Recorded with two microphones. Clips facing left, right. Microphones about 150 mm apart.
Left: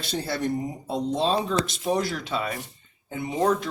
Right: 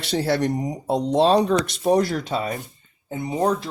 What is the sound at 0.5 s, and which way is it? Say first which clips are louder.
Speech: right 5 dB; 90° right.